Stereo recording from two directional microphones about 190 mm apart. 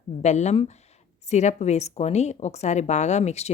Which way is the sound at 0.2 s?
35° left (ahead or behind).